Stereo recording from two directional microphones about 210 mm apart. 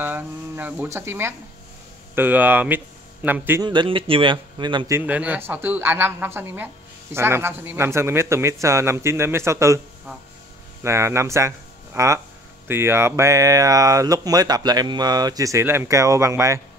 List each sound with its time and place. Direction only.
0.0 s a woman's voice: 10° right (ahead or behind)
3.6 s a woman's voice: 20° right (ahead or behind)
10.8 s a woman's voice: 15° right (ahead or behind)